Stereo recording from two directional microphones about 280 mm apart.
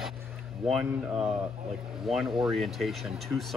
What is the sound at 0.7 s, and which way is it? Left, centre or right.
A man's voice, centre.